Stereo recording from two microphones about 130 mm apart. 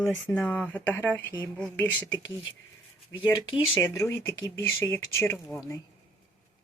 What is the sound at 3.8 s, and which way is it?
Speech, 20° left (ahead or behind).